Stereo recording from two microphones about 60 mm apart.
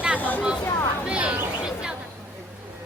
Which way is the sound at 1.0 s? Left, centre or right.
Centre.